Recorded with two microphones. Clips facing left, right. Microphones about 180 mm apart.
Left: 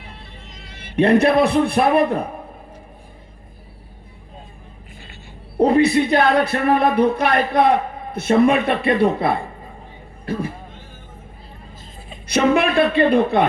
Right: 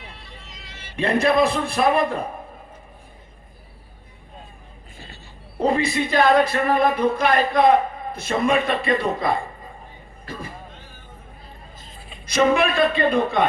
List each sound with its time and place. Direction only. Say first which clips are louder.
0.0 s music: left 2 dB; 55° left (ahead or behind)
5.5 s speech: left 6 dB; 60° left (ahead or behind)
12.3 s speech: left 2 dB; 65° left (ahead or behind)